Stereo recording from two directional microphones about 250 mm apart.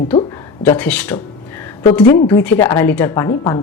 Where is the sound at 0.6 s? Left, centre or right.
Centre.